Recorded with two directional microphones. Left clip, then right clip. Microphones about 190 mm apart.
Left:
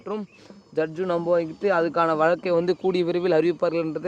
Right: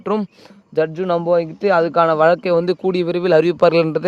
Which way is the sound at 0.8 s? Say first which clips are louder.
Right 7 dB; 40° right (ahead or behind).